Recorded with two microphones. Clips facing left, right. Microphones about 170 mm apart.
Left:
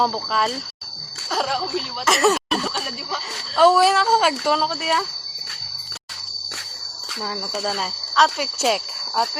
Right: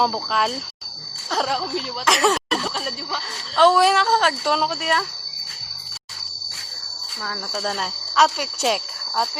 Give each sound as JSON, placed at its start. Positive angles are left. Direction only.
{"t": 0.0, "sound": "speech", "side_deg": 0}
{"t": 7.6, "sound": "speech", "side_deg": 0}